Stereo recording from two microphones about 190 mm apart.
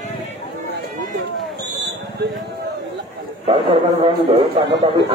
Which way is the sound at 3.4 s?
30° right (ahead or behind).